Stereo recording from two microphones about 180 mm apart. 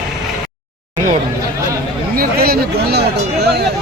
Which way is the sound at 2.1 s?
55° right (ahead or behind).